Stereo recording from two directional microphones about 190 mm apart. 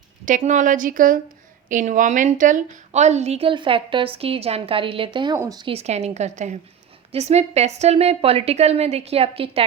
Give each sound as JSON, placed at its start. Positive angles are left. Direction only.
{"t": 0.3, "sound": "a woman's voice", "side_deg": -40}